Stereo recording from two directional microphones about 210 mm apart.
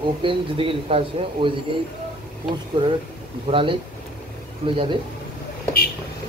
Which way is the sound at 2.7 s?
25° right (ahead or behind).